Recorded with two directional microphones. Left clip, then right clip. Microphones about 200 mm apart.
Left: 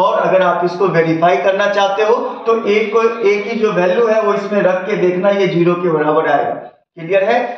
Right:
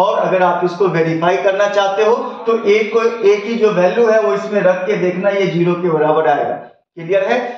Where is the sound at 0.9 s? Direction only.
10° right (ahead or behind).